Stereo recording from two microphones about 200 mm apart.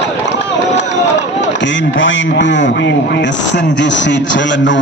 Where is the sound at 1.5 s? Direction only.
65° left (ahead or behind).